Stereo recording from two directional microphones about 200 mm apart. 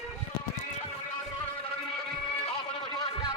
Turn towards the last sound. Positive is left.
turn(degrees=25)  # may be behind; listen again after turning